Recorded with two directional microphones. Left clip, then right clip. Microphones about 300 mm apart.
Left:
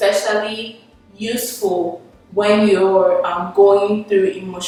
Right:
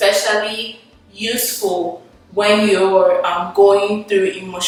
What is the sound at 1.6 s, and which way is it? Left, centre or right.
Speech, left.